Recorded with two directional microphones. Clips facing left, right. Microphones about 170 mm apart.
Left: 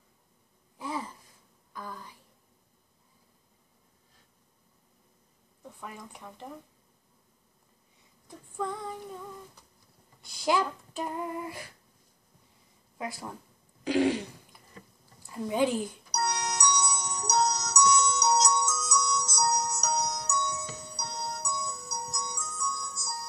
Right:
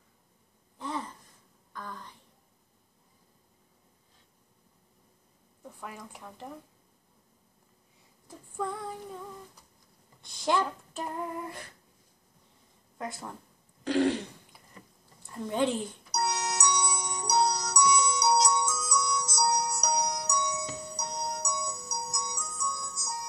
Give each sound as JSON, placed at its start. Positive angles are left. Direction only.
{"t": 0.7, "sound": "a sound", "side_deg": 5}
{"t": 5.6, "sound": "speech", "side_deg": -5}
{"t": 8.3, "sound": "female singing", "side_deg": -5}
{"t": 10.2, "sound": "child singing", "side_deg": 5}
{"t": 12.9, "sound": "speech", "side_deg": 5}
{"t": 13.8, "sound": "throat clearing", "side_deg": 5}
{"t": 15.2, "sound": "speech", "side_deg": 5}
{"t": 16.1, "sound": "music", "side_deg": -5}